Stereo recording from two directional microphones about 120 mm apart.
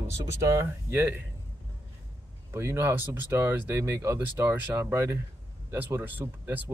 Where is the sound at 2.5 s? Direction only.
20° right (ahead or behind).